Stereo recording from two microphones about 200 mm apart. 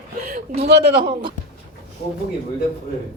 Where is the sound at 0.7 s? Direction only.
50° right (ahead or behind).